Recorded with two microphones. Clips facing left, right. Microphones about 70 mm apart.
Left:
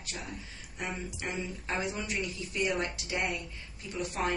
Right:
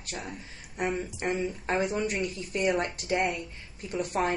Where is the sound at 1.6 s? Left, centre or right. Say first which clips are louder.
Right 6 dB; right.